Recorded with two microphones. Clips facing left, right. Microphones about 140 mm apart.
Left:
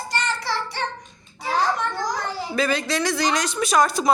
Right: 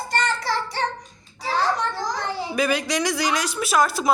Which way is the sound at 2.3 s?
15° right (ahead or behind).